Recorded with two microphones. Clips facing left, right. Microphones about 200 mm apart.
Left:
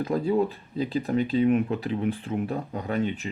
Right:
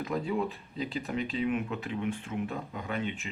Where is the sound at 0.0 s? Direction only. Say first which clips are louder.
Left 7 dB; 35° left (ahead or behind).